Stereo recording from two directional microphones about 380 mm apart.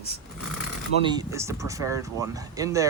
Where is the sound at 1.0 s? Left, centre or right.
Centre.